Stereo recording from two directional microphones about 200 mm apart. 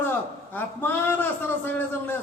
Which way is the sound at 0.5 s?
10° left (ahead or behind).